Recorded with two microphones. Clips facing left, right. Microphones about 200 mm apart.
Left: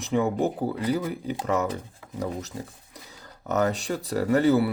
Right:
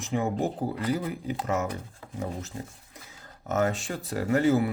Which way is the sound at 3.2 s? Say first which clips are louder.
Left 2 dB; 35° left (ahead or behind).